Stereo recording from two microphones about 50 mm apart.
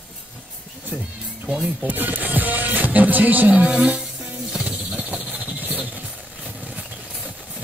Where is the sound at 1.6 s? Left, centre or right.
Right.